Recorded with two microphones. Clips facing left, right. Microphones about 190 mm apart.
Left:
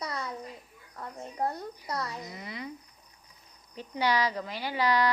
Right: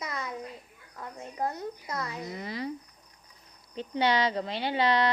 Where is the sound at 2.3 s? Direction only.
30° right (ahead or behind).